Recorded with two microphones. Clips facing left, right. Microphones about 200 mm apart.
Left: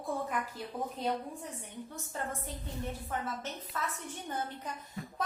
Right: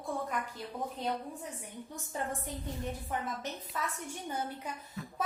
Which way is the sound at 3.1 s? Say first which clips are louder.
Right 1 dB; 15° right (ahead or behind).